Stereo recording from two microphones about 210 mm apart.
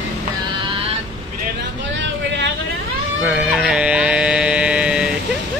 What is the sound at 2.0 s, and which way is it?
Vehicle, 55° right (ahead or behind).